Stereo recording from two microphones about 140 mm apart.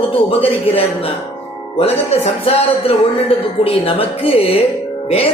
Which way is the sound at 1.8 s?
45° left (ahead or behind).